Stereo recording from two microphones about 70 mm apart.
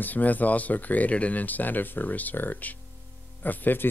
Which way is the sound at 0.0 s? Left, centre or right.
Left.